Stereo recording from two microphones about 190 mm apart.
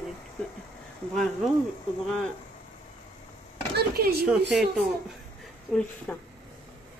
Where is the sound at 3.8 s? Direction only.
55° right (ahead or behind).